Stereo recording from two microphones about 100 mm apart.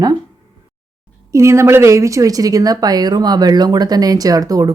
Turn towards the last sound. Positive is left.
turn(degrees=-40)  # may be behind; listen again after turning